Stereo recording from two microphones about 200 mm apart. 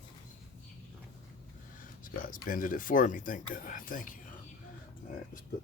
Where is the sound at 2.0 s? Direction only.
45° left (ahead or behind).